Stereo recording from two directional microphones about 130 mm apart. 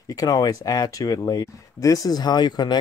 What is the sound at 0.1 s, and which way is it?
Speech, 30° left (ahead or behind).